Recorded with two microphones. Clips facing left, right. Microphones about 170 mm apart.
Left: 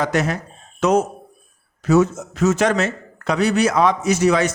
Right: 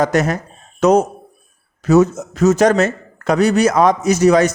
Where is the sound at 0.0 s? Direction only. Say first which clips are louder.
Right 4 dB; 45° right (ahead or behind).